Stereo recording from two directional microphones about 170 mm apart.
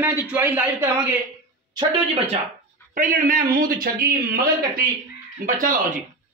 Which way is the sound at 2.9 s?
55° right (ahead or behind).